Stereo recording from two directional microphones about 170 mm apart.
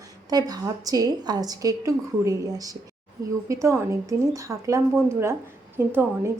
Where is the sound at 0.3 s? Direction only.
20° right (ahead or behind).